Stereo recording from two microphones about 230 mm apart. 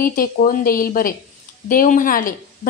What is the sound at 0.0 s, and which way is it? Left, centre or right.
Speech, left.